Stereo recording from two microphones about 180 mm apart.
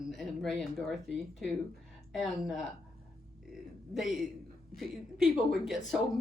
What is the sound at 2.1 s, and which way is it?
Speech, centre (ahead or behind).